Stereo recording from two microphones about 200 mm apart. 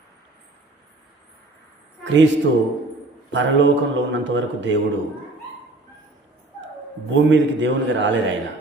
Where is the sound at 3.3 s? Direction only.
65° right (ahead or behind).